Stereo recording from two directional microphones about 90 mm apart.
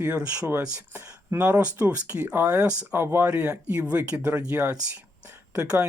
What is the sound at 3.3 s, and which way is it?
Speech, 15° right (ahead or behind).